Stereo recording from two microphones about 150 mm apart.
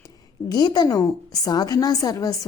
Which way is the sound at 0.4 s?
25° left (ahead or behind).